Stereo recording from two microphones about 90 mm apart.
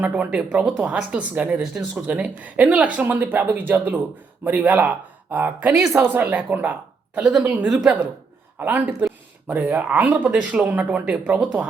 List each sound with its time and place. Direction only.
0.0 s a woman's voice: 15° right (ahead or behind)
7.2 s a woman's voice: 10° right (ahead or behind)